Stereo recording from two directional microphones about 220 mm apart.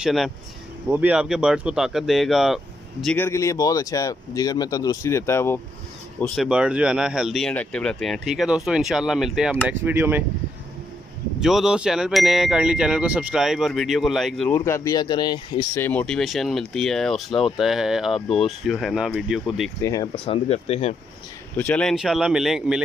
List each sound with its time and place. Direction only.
0.0 s speech: centre (ahead or behind)
3.2 s speech: 15° left (ahead or behind)
6.2 s speech: centre (ahead or behind)
11.3 s speech: centre (ahead or behind)
14.5 s speech: 15° left (ahead or behind)
19.8 s speech: 15° left (ahead or behind)
20.4 s speech: 30° left (ahead or behind)
21.5 s speech: 5° left (ahead or behind)